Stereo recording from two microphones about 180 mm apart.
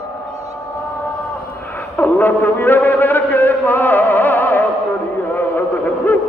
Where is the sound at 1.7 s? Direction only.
10° left (ahead or behind).